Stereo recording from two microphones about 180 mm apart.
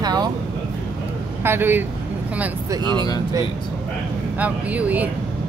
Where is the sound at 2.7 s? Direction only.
25° right (ahead or behind).